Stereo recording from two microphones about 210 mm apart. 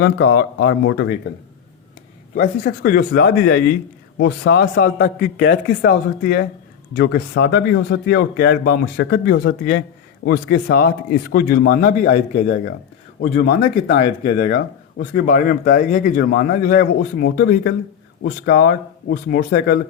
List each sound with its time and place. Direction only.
0.0 s speech: 50° left (ahead or behind)
2.6 s speech: 45° left (ahead or behind)
6.9 s speech: 60° left (ahead or behind)
13.8 s speech: 30° left (ahead or behind)
14.3 s speech: 50° left (ahead or behind)